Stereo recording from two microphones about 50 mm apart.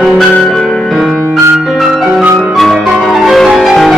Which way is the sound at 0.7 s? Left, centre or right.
Centre.